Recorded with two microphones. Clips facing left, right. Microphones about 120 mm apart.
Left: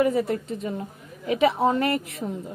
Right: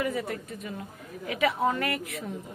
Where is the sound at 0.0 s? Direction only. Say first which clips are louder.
Left 8 dB; 30° left (ahead or behind).